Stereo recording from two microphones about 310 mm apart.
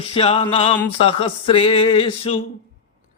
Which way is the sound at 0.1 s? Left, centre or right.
Centre.